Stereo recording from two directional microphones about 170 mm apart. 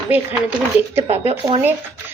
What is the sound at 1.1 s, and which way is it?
Speech, 35° right (ahead or behind).